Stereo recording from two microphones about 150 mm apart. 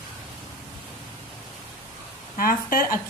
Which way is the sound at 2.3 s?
75° left (ahead or behind).